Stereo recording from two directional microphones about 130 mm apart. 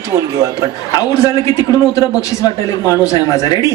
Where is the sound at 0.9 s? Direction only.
25° left (ahead or behind).